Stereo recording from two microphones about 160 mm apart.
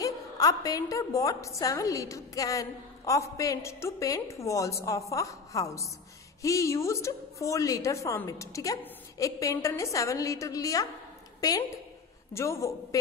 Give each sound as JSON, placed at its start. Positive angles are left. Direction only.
{"t": 0.0, "sound": "a woman's voice", "side_deg": 20}
{"t": 12.4, "sound": "a woman's voice", "side_deg": 20}